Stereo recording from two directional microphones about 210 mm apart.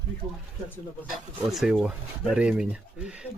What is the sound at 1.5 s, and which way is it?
Speech, centre (ahead or behind).